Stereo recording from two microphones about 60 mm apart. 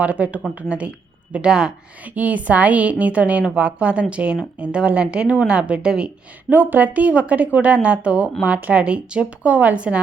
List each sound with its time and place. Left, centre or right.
0.0 s a woman's voice: right
2.1 s a woman's voice: right
6.5 s a woman's voice: right